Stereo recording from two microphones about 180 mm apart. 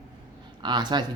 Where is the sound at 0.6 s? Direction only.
25° right (ahead or behind).